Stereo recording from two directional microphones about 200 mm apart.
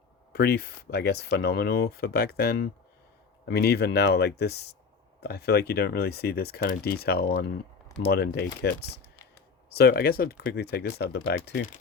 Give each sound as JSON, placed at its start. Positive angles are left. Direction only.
{"t": 0.3, "sound": "speech", "side_deg": 50}